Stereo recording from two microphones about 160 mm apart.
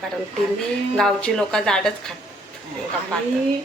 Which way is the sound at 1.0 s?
5° left (ahead or behind).